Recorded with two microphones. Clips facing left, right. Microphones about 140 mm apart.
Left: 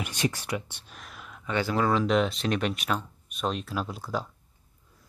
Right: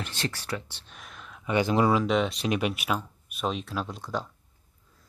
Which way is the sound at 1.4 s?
15° right (ahead or behind).